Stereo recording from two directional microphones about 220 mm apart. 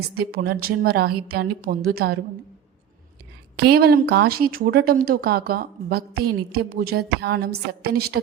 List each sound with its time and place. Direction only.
0.1 s speech: 45° right (ahead or behind)
3.6 s speech: 45° right (ahead or behind)